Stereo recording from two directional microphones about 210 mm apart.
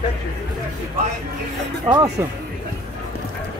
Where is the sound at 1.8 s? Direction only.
20° right (ahead or behind).